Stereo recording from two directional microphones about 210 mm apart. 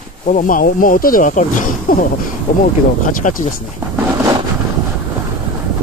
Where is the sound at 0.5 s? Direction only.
40° left (ahead or behind).